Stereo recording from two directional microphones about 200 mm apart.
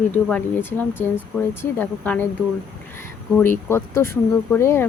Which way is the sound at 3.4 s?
10° left (ahead or behind).